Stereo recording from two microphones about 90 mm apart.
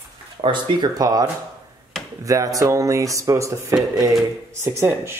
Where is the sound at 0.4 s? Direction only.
65° right (ahead or behind).